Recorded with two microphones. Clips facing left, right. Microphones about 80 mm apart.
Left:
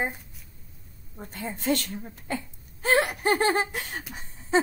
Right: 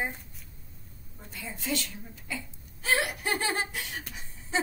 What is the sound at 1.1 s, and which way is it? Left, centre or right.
Speech, left.